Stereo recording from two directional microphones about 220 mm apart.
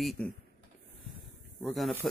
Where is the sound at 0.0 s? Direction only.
Centre (ahead or behind).